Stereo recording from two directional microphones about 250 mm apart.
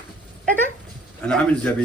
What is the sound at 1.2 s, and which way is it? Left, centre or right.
Speech, centre.